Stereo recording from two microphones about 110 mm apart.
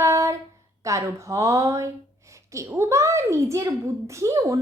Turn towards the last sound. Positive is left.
turn(degrees=-30)  # may be behind; listen again after turning